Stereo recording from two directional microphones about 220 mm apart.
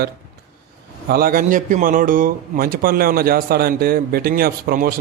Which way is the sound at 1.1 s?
40° right (ahead or behind).